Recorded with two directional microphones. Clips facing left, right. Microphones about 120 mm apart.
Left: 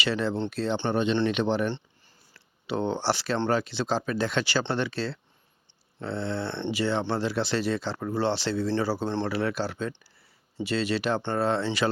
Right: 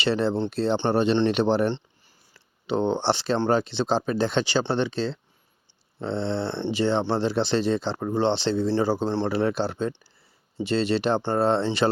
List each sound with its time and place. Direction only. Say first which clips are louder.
0.0 s speech: right 4 dB; 30° right (ahead or behind)
2.3 s speech: right 4 dB; 25° right (ahead or behind)